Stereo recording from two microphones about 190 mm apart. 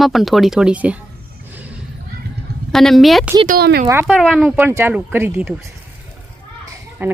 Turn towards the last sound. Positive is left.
turn(degrees=-10)  # may be behind; listen again after turning